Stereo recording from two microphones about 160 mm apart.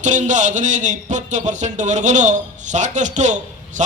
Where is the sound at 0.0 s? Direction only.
50° right (ahead or behind).